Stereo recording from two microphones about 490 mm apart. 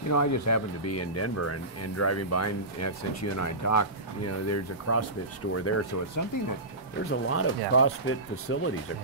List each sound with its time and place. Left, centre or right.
0.1 s speech: left